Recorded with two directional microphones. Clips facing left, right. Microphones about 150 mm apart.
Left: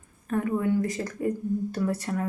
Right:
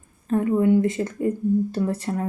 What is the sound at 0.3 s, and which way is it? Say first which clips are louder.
Speech: right 6 dB; 20° right (ahead or behind).